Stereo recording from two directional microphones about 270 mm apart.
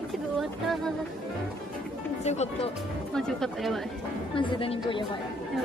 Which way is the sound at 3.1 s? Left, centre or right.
Centre.